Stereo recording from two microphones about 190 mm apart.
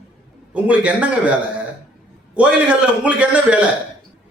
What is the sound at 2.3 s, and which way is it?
A man's voice, 5° right (ahead or behind).